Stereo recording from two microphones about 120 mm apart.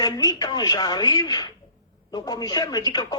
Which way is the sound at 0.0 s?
35° left (ahead or behind).